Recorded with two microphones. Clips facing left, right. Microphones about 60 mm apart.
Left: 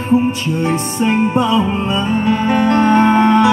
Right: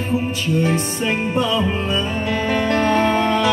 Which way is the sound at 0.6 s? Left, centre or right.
Left.